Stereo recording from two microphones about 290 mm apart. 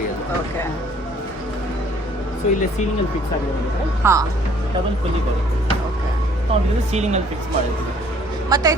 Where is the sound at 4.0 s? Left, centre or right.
Centre.